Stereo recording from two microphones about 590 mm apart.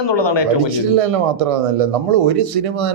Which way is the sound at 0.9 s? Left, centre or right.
Right.